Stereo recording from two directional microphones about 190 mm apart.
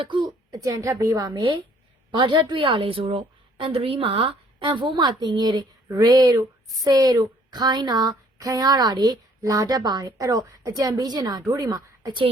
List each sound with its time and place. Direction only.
0.0 s a woman's voice: 25° right (ahead or behind)